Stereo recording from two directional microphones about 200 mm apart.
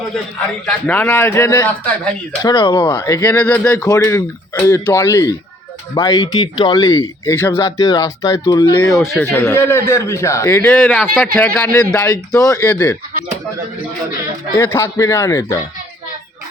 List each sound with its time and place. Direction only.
0.6 s a man's voice: 5° left (ahead or behind)
8.8 s a man's voice: centre (ahead or behind); by 12.5 s 20° left (ahead or behind)
12.6 s a man's voice: 5° left (ahead or behind)
14.5 s a man's voice: 10° left (ahead or behind)